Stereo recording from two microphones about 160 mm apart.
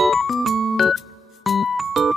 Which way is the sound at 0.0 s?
Centre (ahead or behind).